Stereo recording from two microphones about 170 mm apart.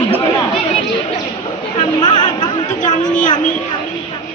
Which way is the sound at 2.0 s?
25° left (ahead or behind).